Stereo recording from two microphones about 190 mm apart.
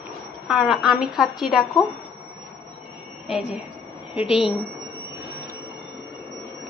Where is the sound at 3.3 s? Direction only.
5° right (ahead or behind).